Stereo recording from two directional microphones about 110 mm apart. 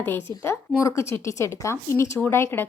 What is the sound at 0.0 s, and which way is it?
Speech, 20° left (ahead or behind).